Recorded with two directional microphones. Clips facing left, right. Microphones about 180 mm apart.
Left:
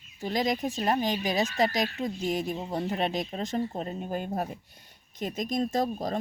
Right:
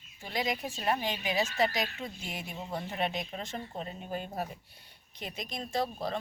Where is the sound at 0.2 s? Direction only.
40° left (ahead or behind).